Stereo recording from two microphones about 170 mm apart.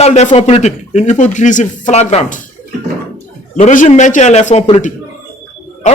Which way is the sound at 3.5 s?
45° left (ahead or behind).